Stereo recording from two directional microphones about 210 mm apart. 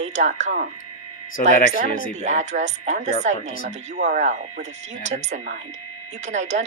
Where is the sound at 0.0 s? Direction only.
35° right (ahead or behind).